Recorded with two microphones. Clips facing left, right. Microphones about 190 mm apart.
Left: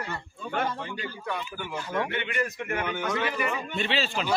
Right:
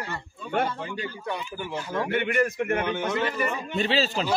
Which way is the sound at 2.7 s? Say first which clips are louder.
Even; 30° right (ahead or behind).